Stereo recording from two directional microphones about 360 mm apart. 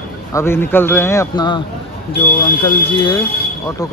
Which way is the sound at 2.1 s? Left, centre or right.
Left.